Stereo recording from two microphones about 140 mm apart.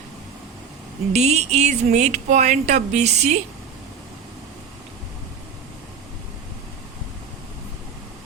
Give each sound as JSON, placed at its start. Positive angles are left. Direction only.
{"t": 1.1, "sound": "speech", "side_deg": -50}